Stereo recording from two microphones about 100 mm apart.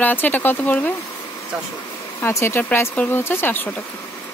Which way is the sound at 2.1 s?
25° left (ahead or behind).